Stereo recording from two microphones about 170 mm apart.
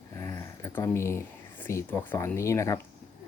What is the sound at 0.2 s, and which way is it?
Speech, 20° left (ahead or behind).